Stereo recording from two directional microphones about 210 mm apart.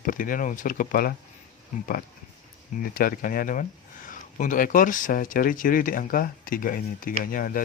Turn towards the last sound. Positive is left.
turn(degrees=40)  # may be behind; listen again after turning